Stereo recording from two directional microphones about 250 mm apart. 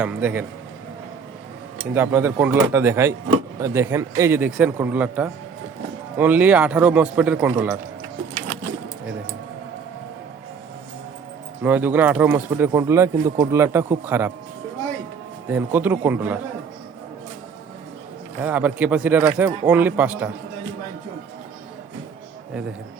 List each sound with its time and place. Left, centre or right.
0.0 s speech: centre
1.8 s speech: centre
11.6 s speech: centre
15.4 s speech: centre
18.4 s speech: centre